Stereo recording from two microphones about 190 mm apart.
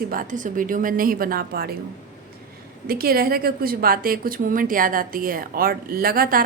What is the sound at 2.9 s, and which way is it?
A woman's voice, 50° right (ahead or behind).